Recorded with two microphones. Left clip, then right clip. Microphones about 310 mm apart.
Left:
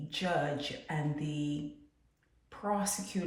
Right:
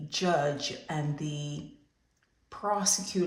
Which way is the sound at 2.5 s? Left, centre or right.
Centre.